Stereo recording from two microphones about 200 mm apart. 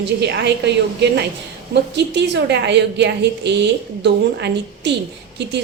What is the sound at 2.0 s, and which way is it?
A woman's voice, 60° right (ahead or behind).